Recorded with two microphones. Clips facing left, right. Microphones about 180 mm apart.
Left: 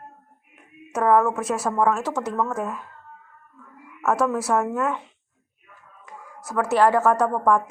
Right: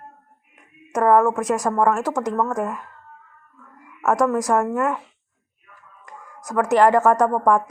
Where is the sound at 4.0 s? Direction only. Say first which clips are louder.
Right 3 dB; 15° right (ahead or behind).